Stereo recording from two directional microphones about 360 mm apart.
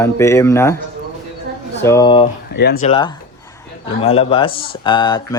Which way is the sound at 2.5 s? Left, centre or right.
Left.